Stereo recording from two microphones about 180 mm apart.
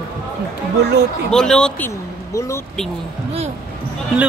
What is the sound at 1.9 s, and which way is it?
Speech, 15° left (ahead or behind).